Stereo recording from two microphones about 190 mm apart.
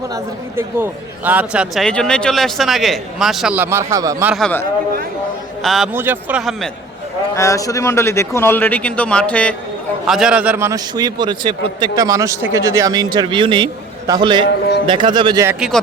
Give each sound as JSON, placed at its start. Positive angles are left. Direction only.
{"t": 0.1, "sound": "a man's voice", "side_deg": -10}
{"t": 4.3, "sound": "a man's voice", "side_deg": 0}
{"t": 5.6, "sound": "a man's voice", "side_deg": 0}
{"t": 5.9, "sound": "speech", "side_deg": -10}
{"t": 7.3, "sound": "a man's voice", "side_deg": 15}
{"t": 15.4, "sound": "a man's voice", "side_deg": 0}